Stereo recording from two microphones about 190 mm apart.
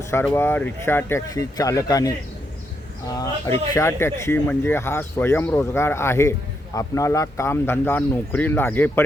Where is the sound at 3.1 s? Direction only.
20° left (ahead or behind).